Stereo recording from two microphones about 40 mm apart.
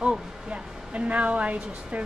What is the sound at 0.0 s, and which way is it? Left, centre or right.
A woman's voice, right.